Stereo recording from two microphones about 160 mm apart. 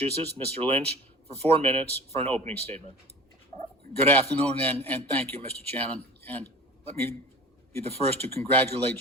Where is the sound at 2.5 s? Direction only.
10° left (ahead or behind).